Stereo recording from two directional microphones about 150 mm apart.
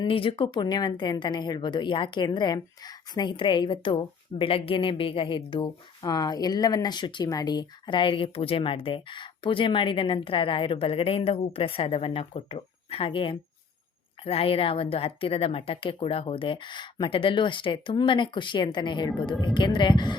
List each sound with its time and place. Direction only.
0.0 s speech: 35° left (ahead or behind)